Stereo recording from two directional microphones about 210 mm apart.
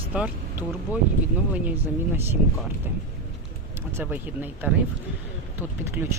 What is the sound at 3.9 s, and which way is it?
Speech, 10° right (ahead or behind).